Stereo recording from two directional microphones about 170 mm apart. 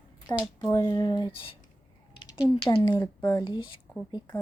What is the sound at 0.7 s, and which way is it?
Speech, 20° left (ahead or behind).